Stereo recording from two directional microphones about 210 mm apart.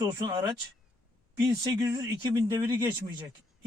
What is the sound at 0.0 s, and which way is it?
Speech, 20° right (ahead or behind).